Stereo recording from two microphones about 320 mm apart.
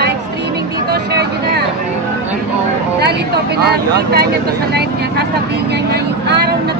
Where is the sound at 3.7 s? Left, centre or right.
Right.